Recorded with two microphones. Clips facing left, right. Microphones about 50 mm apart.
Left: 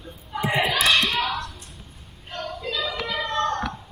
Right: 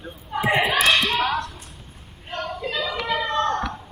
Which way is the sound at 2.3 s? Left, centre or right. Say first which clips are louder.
Right 2 dB; right.